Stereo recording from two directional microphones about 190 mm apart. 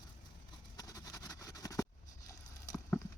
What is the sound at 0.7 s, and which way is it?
Vehicle, 20° left (ahead or behind).